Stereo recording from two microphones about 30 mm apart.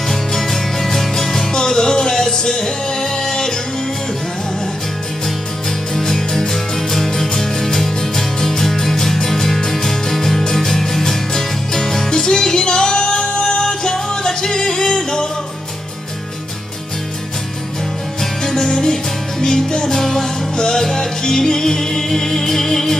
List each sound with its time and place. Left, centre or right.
0.1 s music: centre
5.9 s music: centre
18.4 s music: centre
20.5 s music: left